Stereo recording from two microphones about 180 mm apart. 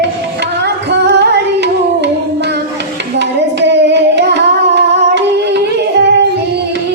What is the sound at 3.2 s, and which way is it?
Carnatic music, 75° right (ahead or behind).